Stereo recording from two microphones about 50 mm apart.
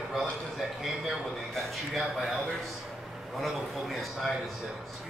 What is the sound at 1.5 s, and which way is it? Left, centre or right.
Speech, centre.